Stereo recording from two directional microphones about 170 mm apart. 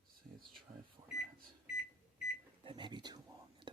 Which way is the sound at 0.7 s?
25° right (ahead or behind).